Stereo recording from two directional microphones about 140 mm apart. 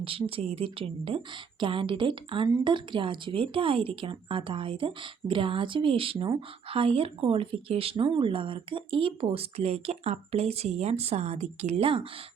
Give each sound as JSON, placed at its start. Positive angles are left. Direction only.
{"t": 0.0, "sound": "speech", "side_deg": -40}